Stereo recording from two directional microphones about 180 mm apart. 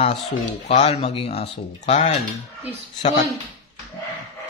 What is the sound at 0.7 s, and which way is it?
Speech, 35° left (ahead or behind).